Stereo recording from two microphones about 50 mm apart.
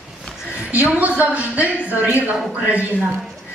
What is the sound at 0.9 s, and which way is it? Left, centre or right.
A woman's voice, right.